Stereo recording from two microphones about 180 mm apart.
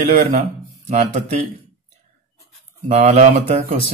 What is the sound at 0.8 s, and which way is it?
Speech, 40° right (ahead or behind).